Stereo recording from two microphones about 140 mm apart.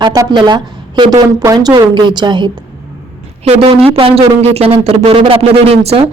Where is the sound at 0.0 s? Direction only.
30° right (ahead or behind).